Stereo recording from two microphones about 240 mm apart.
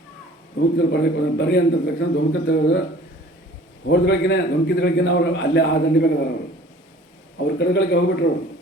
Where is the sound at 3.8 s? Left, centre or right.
Left.